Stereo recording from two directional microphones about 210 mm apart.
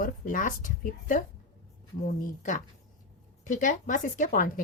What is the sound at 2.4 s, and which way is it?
Speech, 35° left (ahead or behind).